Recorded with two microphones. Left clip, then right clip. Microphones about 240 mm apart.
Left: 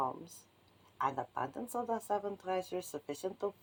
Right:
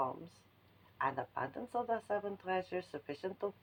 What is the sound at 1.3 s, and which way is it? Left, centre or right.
A woman's voice, centre.